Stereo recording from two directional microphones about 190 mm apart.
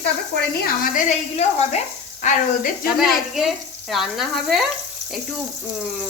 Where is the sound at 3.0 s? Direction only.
Centre (ahead or behind).